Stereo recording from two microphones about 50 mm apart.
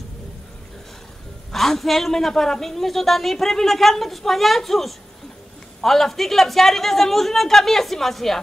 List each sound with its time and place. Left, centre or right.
1.5 s a woman's voice: centre